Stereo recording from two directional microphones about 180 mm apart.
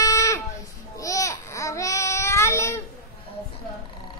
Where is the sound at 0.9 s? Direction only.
15° left (ahead or behind).